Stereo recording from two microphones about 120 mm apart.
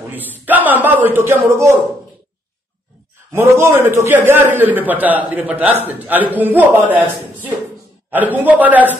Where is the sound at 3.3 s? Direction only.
20° right (ahead or behind).